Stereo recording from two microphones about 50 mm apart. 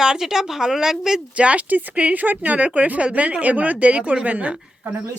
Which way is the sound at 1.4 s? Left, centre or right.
Right.